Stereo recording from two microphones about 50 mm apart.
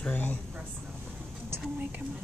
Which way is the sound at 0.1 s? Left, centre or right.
Left.